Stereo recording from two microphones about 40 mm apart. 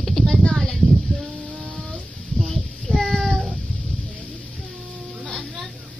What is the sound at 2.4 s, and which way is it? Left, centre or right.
Child singing, centre.